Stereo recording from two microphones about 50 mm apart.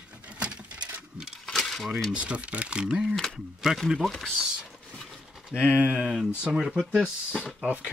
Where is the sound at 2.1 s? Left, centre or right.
Right.